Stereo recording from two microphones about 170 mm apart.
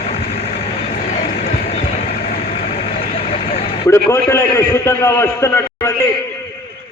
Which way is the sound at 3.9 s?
15° left (ahead or behind).